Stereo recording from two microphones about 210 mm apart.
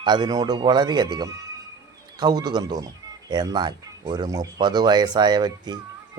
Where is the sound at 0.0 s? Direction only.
20° right (ahead or behind).